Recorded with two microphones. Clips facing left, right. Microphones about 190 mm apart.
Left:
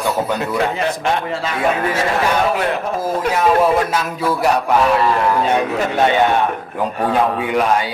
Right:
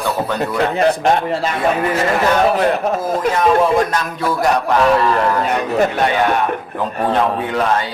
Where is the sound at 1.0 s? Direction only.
40° right (ahead or behind).